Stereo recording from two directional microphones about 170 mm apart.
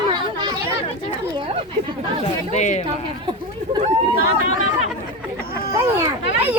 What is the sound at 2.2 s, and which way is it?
Speech, 45° left (ahead or behind).